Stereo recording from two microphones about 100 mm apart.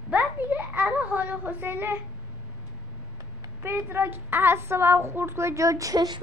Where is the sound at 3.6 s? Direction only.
20° right (ahead or behind).